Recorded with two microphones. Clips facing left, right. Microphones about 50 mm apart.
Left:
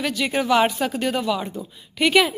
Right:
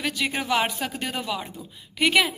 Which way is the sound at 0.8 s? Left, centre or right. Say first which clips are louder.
Left 6 dB; centre.